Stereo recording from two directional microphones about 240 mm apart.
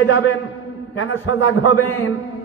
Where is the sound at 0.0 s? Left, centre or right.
Left.